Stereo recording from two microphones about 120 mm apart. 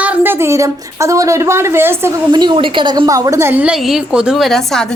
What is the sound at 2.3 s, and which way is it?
Speech, 40° right (ahead or behind).